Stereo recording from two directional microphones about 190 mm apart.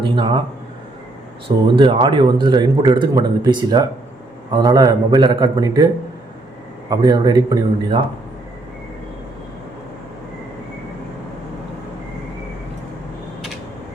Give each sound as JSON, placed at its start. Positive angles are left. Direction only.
{"t": 1.5, "sound": "speech", "side_deg": -25}
{"t": 6.9, "sound": "speech", "side_deg": -20}